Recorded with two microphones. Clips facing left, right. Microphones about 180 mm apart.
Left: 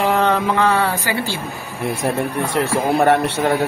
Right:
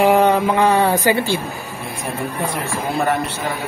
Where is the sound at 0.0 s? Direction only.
10° right (ahead or behind).